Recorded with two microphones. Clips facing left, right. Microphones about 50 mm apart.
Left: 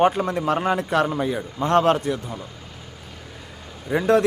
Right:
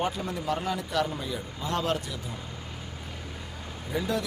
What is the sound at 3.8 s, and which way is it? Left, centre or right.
Speech, left.